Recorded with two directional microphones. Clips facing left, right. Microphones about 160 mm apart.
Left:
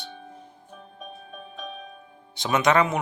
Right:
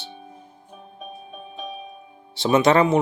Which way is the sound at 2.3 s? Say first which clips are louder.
Right 4 dB; 30° right (ahead or behind).